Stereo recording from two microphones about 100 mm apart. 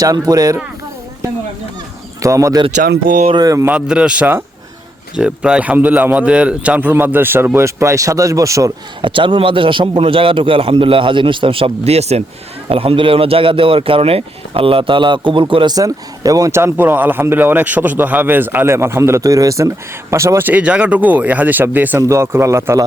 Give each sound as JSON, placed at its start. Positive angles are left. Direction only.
{"t": 0.0, "sound": "speech", "side_deg": -40}
{"t": 2.2, "sound": "speech", "side_deg": -35}
{"t": 3.7, "sound": "a man's voice", "side_deg": -10}
{"t": 9.0, "sound": "a man's voice", "side_deg": -60}
{"t": 12.6, "sound": "a man's voice", "side_deg": -70}
{"t": 15.7, "sound": "speech", "side_deg": -35}
{"t": 16.5, "sound": "a man's voice", "side_deg": -25}
{"t": 20.5, "sound": "a man's voice", "side_deg": -10}